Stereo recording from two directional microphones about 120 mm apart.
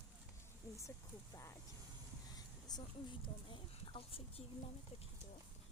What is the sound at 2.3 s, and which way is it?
Speech, 35° left (ahead or behind).